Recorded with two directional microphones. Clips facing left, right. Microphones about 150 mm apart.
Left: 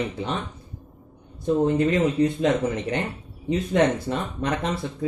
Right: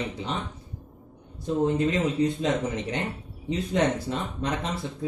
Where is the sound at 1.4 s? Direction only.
55° left (ahead or behind).